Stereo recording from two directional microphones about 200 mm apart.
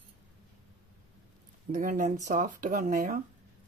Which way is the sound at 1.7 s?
40° right (ahead or behind).